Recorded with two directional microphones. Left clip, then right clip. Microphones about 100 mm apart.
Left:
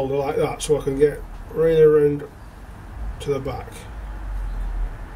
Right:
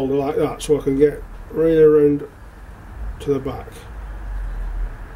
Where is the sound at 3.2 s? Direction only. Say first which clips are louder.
Right 3 dB; 15° right (ahead or behind).